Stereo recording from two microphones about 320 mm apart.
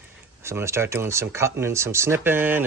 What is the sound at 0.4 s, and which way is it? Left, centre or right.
Speech, centre.